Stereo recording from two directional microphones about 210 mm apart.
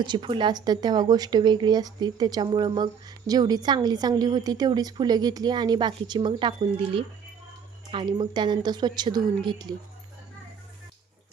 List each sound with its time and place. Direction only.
0.0 s a woman's voice: 25° right (ahead or behind)